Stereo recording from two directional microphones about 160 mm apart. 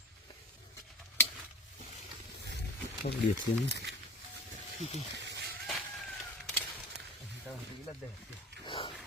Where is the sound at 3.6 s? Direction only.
90° right.